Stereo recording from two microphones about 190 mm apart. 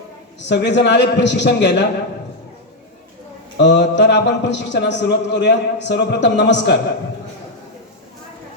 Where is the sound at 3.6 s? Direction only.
65° left (ahead or behind).